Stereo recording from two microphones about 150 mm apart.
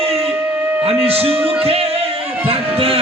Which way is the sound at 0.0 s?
40° right (ahead or behind).